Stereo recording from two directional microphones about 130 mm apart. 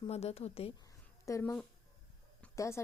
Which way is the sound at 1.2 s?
20° left (ahead or behind).